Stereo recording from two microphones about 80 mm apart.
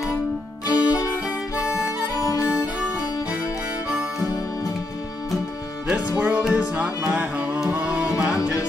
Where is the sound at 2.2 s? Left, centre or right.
Left.